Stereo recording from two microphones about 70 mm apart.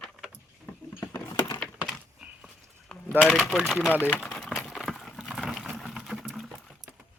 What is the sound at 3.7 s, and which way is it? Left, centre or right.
Speech, centre.